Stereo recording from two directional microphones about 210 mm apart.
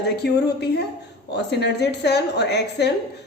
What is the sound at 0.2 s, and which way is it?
A woman's voice, 50° left (ahead or behind).